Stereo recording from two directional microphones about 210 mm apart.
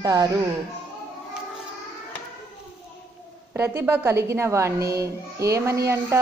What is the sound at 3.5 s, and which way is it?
Speech, 10° right (ahead or behind).